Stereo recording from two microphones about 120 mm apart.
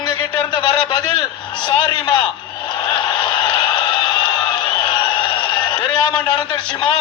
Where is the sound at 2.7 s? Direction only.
40° left (ahead or behind).